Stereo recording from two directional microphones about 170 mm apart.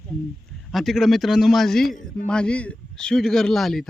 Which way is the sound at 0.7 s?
Centre (ahead or behind).